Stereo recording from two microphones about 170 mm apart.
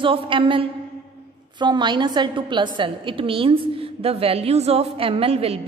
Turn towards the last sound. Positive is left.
turn(degrees=-35)  # may be behind; listen again after turning